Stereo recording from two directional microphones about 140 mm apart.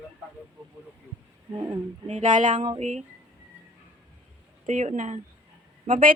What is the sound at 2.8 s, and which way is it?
Speech, 55° right (ahead or behind).